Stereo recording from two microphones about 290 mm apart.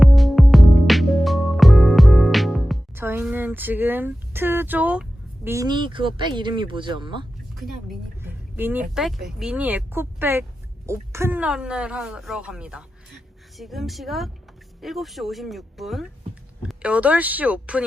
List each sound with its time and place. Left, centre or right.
0.0 s music: centre
5.5 s speech: centre
7.5 s speech: centre